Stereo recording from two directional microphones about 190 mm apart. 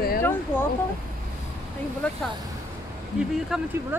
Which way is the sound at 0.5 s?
10° left (ahead or behind).